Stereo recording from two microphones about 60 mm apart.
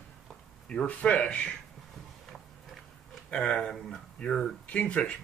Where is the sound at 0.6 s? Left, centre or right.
Centre.